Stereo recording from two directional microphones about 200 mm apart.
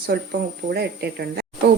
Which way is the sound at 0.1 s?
55° right (ahead or behind).